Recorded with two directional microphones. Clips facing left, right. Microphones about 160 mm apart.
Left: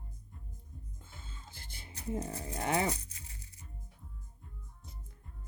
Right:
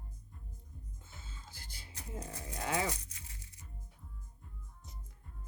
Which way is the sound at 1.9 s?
30° left (ahead or behind).